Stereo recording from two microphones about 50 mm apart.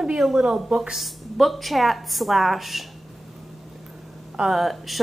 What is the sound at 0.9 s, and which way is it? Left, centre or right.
A woman's voice, centre.